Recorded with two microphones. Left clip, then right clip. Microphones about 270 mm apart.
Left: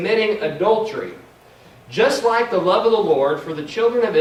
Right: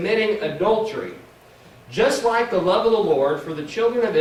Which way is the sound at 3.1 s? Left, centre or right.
Centre.